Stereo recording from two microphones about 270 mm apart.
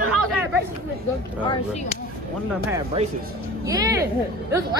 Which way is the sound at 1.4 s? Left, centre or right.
Centre.